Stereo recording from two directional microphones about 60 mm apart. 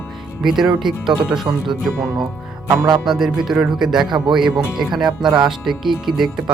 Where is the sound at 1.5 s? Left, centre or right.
Right.